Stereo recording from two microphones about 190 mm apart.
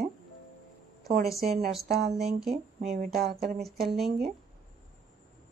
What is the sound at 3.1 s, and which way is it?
Speech, 55° right (ahead or behind).